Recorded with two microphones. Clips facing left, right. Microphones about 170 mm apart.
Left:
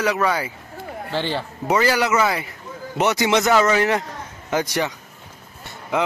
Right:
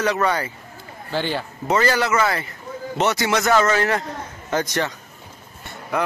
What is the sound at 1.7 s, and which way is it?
Speech, 10° left (ahead or behind).